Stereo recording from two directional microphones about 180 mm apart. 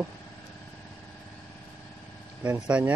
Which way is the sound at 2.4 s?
5° right (ahead or behind).